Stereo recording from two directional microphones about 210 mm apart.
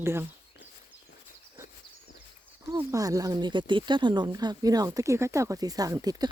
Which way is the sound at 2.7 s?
15° right (ahead or behind).